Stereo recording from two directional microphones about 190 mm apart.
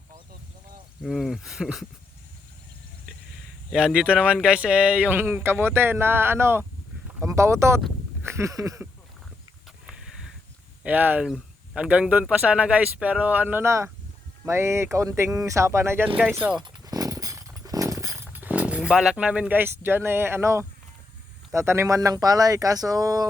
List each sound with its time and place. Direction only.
1.0 s speech: centre (ahead or behind)
3.7 s speech: 5° right (ahead or behind)
8.2 s a sound: 15° right (ahead or behind)
10.8 s speech: 10° right (ahead or behind)
16.6 s a sound: 20° right (ahead or behind)
21.5 s speech: 15° right (ahead or behind)